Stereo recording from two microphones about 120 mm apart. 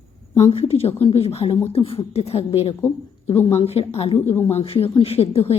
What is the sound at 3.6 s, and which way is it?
A woman's voice, 55° left (ahead or behind).